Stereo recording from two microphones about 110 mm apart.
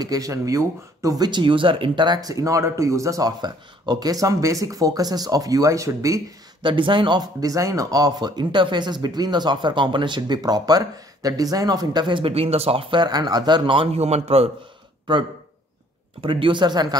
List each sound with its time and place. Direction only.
0.0 s speech: 35° right (ahead or behind)
6.6 s speech: 50° right (ahead or behind)
13.9 s a man's voice: 75° right (ahead or behind)
16.2 s speech: 50° right (ahead or behind)